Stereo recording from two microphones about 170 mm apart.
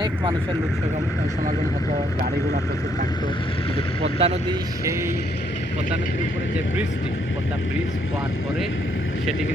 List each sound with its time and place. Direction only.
4.0 s speech: 35° right (ahead or behind)